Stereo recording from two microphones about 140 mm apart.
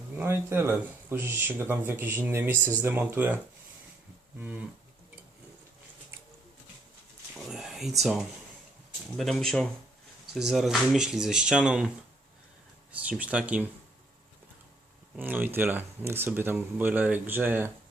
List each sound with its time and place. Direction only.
0.2 s speech: 15° right (ahead or behind)
4.4 s speech: 10° right (ahead or behind)
7.3 s a sound: 5° right (ahead or behind)
9.1 s speech: centre (ahead or behind)
12.9 s speech: 10° right (ahead or behind)
15.1 s speech: 10° right (ahead or behind)